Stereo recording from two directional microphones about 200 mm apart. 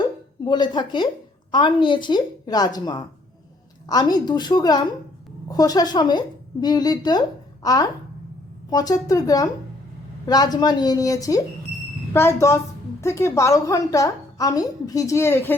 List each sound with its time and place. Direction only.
0.4 s a woman's voice: 20° left (ahead or behind)